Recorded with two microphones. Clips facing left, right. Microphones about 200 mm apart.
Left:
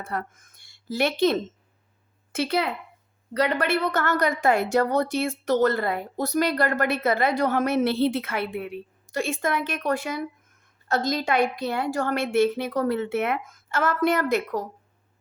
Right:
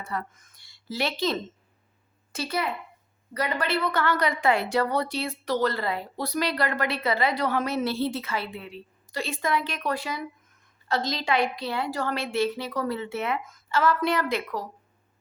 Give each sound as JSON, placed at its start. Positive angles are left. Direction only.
{"t": 0.0, "sound": "a woman's voice", "side_deg": 55}